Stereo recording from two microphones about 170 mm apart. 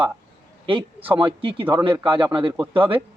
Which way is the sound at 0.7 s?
30° right (ahead or behind).